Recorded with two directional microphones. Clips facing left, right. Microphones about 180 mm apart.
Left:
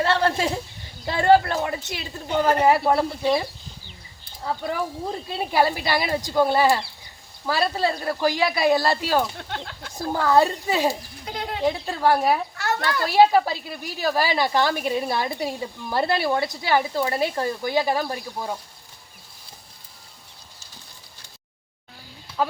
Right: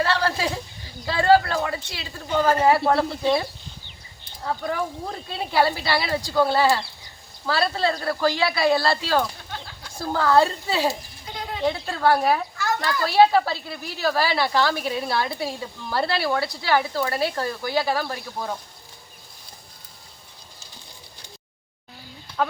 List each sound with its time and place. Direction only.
0.0 s a sound: 25° left (ahead or behind)
1.9 s speech: 20° left (ahead or behind)
2.8 s speech: 5° left (ahead or behind)
4.4 s speech: 10° left (ahead or behind)
9.4 s speech: 65° left (ahead or behind)
10.1 s speech: 15° left (ahead or behind)
11.3 s speech: 65° left (ahead or behind)
11.6 s speech: 15° left (ahead or behind)
22.4 s speech: 5° left (ahead or behind)